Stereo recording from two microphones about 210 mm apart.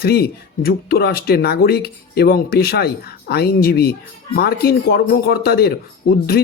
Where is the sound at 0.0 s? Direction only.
50° left (ahead or behind).